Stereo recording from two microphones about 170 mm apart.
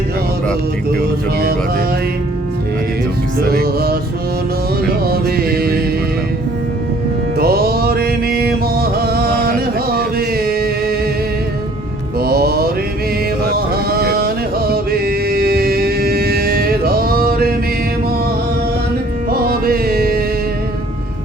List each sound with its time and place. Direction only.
3.5 s music: 65° right (ahead or behind)
5.0 s music: 65° right (ahead or behind)
7.3 s music: 65° right (ahead or behind)
9.9 s a sound: 65° right (ahead or behind)
12.2 s music: 65° right (ahead or behind)
13.9 s music: 65° right (ahead or behind)
19.3 s music: 60° right (ahead or behind)